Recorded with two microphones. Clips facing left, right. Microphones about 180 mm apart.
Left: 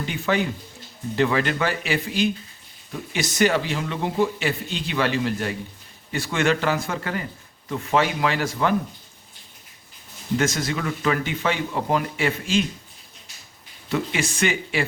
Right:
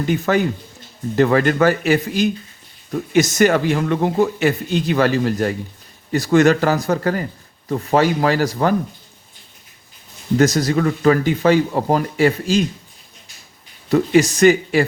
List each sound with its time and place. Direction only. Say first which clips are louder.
0.0 s speech: right 6 dB; 45° right (ahead or behind)
10.3 s speech: right 8 dB; 40° right (ahead or behind)
13.9 s speech: right 11 dB; 40° right (ahead or behind)